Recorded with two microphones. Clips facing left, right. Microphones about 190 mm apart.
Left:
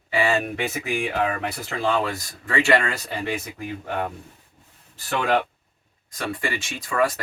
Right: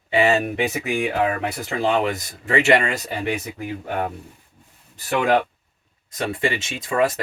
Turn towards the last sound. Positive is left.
turn(degrees=-20)  # may be behind; listen again after turning